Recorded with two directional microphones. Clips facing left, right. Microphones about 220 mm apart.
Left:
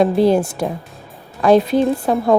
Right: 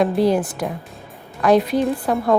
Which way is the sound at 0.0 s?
25° left (ahead or behind).